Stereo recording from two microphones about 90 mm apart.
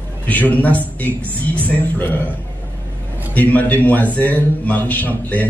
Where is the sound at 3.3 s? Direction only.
15° left (ahead or behind).